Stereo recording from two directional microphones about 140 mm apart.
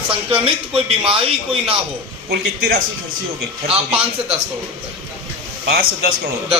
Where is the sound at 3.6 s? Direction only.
45° right (ahead or behind).